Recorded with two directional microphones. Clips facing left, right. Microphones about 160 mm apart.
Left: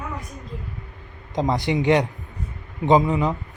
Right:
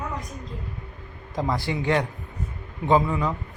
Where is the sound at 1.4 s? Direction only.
20° left (ahead or behind).